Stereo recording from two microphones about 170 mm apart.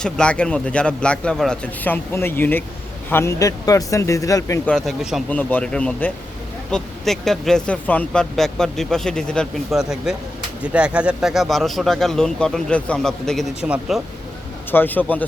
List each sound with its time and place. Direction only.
0.0 s a man's voice: 5° left (ahead or behind)
4.7 s a man's voice: centre (ahead or behind)
14.7 s a man's voice: 10° left (ahead or behind)